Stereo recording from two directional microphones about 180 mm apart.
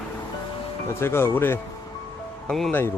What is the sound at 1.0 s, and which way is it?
Speech, 15° left (ahead or behind).